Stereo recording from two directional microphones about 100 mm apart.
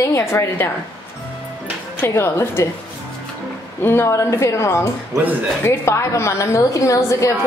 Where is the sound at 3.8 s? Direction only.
25° left (ahead or behind).